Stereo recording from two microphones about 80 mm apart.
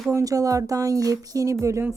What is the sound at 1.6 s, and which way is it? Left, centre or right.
Speech, right.